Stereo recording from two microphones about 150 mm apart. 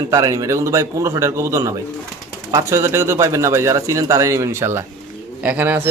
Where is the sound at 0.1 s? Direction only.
20° right (ahead or behind).